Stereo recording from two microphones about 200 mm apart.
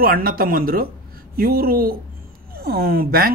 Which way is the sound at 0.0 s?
45° right (ahead or behind).